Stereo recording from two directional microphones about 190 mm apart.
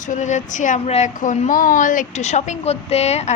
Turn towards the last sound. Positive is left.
turn(degrees=35)  # may be behind; listen again after turning